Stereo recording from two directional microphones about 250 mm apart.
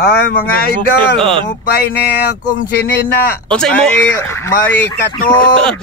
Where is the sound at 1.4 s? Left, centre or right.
Left.